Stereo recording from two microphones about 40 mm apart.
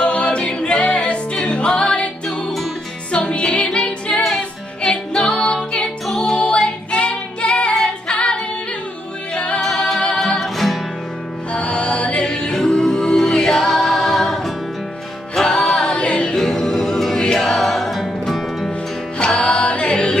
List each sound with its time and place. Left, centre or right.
0.0 s music: left
3.1 s music: left
4.8 s music: centre
7.8 s female singing: left
9.3 s music: left
9.6 s singing: centre
10.1 s music: centre
10.4 s music: centre
11.5 s music: left
12.5 s music: centre
15.3 s music: centre
16.3 s music: centre
19.2 s a capella: left